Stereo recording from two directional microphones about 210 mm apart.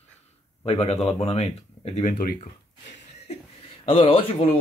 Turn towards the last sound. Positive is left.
turn(degrees=25)  # may be behind; listen again after turning